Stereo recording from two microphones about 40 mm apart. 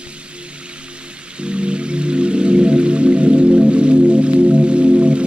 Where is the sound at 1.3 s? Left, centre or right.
Right.